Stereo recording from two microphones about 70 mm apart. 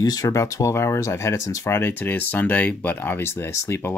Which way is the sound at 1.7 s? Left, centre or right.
Left.